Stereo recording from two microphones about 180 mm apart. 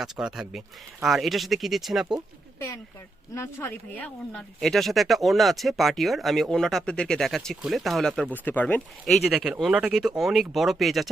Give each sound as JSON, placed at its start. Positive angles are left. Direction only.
{"t": 0.0, "sound": "speech", "side_deg": -5}
{"t": 2.6, "sound": "speech", "side_deg": 15}